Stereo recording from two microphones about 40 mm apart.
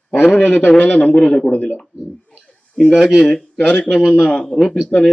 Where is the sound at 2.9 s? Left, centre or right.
Centre.